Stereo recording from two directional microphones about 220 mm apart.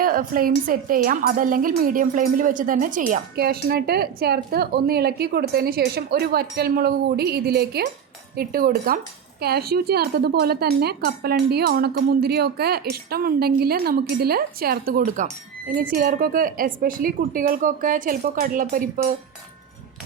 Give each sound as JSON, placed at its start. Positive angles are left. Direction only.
{"t": 0.0, "sound": "speech", "side_deg": -40}